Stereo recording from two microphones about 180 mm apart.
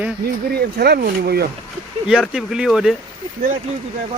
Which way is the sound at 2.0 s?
5° right (ahead or behind).